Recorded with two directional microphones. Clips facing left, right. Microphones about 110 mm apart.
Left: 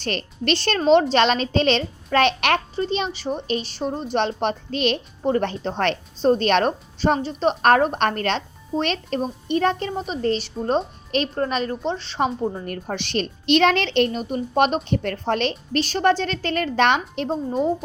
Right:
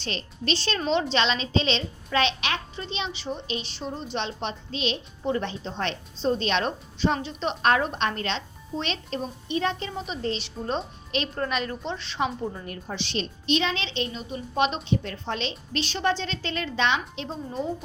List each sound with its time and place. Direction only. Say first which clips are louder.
0.0 s a woman's voice: left 6 dB; 60° left (ahead or behind)
2.7 s a woman's voice: left 9 dB; 45° left (ahead or behind)
12.6 s a woman's voice: left 5 dB; 55° left (ahead or behind)